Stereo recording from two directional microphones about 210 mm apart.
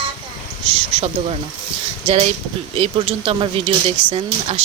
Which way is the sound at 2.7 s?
25° right (ahead or behind).